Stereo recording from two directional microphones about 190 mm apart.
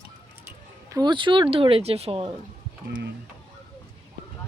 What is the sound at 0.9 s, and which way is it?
A woman's voice, 25° right (ahead or behind).